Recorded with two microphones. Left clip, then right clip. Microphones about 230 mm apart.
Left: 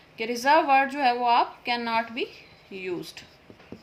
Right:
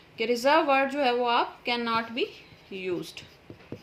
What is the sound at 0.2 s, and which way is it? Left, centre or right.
A woman's voice, left.